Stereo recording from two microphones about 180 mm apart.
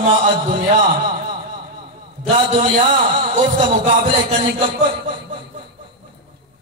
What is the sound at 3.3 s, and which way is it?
Speech, 40° right (ahead or behind).